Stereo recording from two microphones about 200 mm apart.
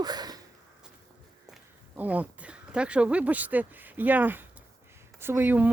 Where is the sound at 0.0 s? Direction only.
20° right (ahead or behind).